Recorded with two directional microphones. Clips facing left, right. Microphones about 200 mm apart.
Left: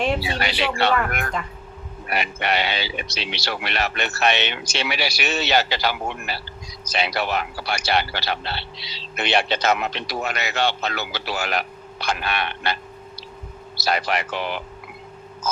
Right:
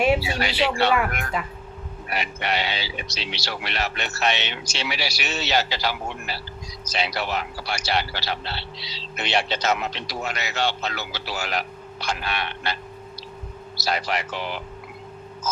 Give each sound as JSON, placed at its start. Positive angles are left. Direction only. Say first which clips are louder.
{"t": 0.3, "sound": "speech", "louder": "right 1 dB", "side_deg": 60}
{"t": 2.0, "sound": "speech", "louder": "left 3 dB", "side_deg": 60}